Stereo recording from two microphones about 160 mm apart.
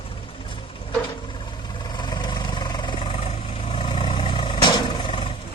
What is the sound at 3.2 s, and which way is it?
Vehicle, 40° left (ahead or behind).